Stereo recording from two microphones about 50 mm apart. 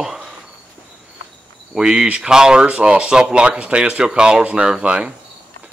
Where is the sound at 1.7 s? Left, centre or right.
Centre.